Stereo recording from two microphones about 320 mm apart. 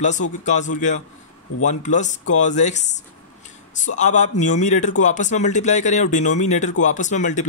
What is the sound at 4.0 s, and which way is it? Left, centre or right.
Speech, left.